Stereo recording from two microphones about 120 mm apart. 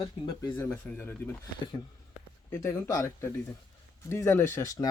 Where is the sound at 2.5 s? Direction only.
25° left (ahead or behind).